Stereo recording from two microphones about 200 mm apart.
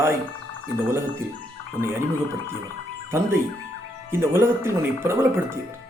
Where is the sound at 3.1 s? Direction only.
10° right (ahead or behind).